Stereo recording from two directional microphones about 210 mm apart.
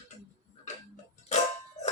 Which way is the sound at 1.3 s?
30° left (ahead or behind).